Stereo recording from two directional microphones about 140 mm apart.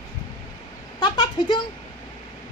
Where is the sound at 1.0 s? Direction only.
35° left (ahead or behind).